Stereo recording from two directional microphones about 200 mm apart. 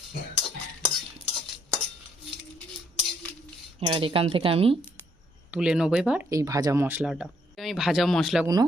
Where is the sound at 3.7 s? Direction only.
25° right (ahead or behind).